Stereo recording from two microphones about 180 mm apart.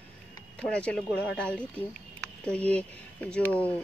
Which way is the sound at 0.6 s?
5° left (ahead or behind).